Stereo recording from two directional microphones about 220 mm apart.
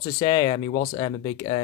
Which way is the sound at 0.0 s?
15° left (ahead or behind).